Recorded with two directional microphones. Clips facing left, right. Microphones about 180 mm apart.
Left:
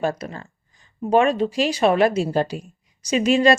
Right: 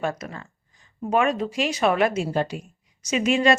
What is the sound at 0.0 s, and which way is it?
A woman's voice, 30° left (ahead or behind).